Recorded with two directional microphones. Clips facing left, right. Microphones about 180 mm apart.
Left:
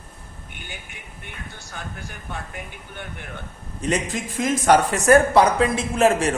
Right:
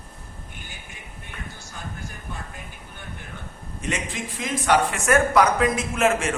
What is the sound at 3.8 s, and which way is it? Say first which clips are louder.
Speech: left 5 dB; 40° left (ahead or behind).